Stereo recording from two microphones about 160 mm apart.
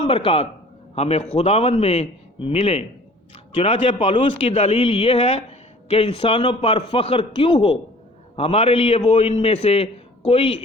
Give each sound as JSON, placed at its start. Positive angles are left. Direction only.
{"t": 0.0, "sound": "a man's voice", "side_deg": 35}